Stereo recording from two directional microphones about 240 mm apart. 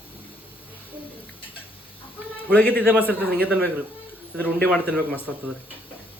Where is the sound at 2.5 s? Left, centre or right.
Centre.